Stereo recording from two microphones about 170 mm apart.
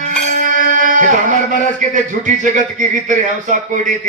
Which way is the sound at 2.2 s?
50° right (ahead or behind).